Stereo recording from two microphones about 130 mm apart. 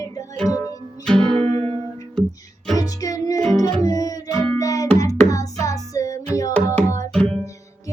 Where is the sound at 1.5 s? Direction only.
50° right (ahead or behind).